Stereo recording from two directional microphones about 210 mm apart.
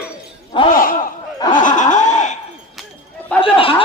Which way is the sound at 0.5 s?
25° left (ahead or behind).